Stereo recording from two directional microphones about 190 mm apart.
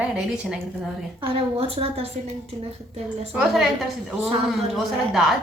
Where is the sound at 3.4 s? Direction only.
Centre (ahead or behind).